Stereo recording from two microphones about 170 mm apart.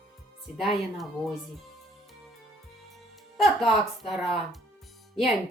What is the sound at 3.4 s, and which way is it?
Speech, centre (ahead or behind).